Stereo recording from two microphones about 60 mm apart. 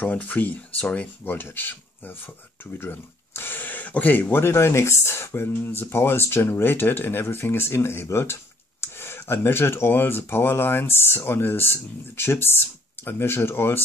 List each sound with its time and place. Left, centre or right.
0.0 s speech: left